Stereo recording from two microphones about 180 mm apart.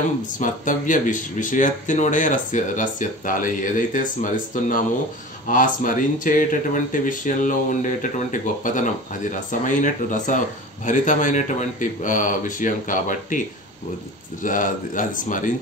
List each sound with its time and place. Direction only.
0.4 s speech: 45° left (ahead or behind)
14.4 s speech: 50° left (ahead or behind)